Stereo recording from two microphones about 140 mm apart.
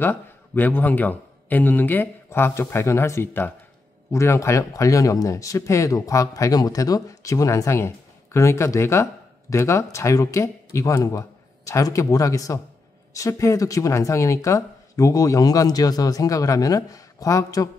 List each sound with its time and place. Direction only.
0.0 s a man's voice: 15° left (ahead or behind)